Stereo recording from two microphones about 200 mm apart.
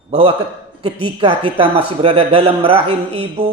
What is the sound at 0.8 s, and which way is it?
Speech, 25° right (ahead or behind).